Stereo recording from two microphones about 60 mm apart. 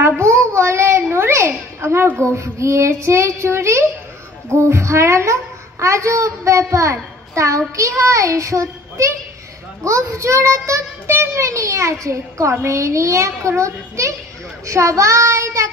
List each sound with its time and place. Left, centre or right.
0.5 s child singing: right
1.8 s a sound: right
2.3 s child singing: right
4.5 s a woman's voice: right